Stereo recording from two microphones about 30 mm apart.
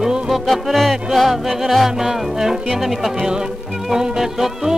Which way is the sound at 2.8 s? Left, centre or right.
Centre.